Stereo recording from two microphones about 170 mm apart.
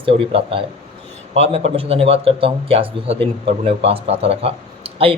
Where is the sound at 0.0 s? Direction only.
35° right (ahead or behind).